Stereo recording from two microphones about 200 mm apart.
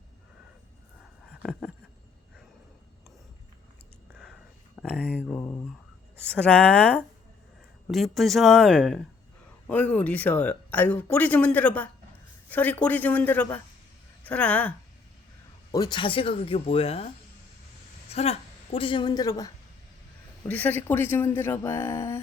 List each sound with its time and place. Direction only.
1.4 s a sound: centre (ahead or behind)
4.8 s a sound: 5° left (ahead or behind)
5.2 s speech: 10° left (ahead or behind)
15.7 s speech: 20° left (ahead or behind)
18.1 s a woman's voice: 30° left (ahead or behind)
20.5 s speech: 10° left (ahead or behind)